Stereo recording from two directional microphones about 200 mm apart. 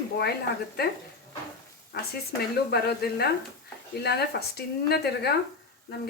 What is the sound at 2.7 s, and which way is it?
Speech, 55° left (ahead or behind).